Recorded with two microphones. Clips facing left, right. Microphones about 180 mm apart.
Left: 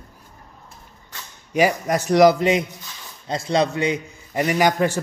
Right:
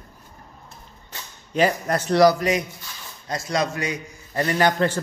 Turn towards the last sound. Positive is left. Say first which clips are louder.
# left 1 dB
turn(degrees=10)  # may be behind; listen again after turning